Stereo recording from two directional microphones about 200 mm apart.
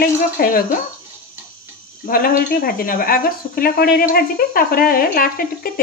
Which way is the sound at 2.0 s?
45° left (ahead or behind).